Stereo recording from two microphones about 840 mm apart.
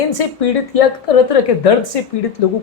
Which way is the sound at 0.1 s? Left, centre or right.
Left.